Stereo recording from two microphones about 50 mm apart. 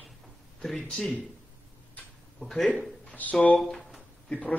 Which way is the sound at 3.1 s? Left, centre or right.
Left.